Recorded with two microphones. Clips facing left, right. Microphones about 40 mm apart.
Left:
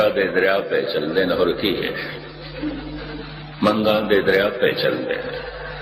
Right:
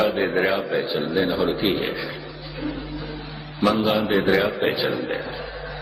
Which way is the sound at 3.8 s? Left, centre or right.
Centre.